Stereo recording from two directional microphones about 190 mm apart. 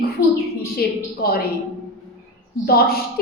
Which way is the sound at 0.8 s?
55° left (ahead or behind).